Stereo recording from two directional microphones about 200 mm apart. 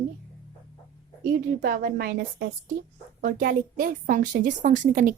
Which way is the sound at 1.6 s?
50° right (ahead or behind).